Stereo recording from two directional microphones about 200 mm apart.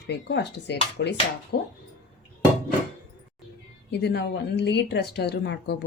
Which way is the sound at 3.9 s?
55° left (ahead or behind).